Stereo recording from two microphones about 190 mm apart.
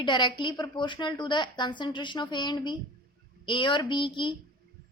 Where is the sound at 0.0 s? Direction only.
25° left (ahead or behind).